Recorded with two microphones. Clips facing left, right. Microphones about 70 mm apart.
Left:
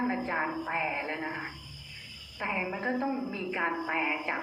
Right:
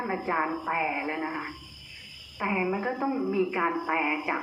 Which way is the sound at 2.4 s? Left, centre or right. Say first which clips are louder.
Right 5 dB; centre.